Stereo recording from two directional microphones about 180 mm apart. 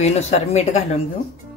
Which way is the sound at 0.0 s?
40° left (ahead or behind).